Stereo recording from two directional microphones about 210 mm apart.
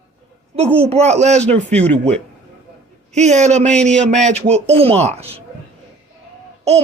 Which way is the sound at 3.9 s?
5° left (ahead or behind).